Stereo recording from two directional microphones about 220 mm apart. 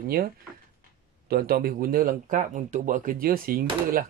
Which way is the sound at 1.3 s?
40° right (ahead or behind).